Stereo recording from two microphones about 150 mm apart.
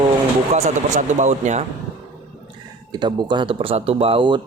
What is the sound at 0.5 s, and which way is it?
Speech, 50° right (ahead or behind).